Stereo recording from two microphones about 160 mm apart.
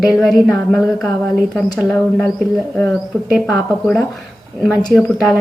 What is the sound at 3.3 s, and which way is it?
A woman's voice, centre (ahead or behind).